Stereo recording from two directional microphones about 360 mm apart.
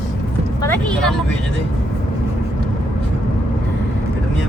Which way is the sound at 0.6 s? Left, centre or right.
Centre.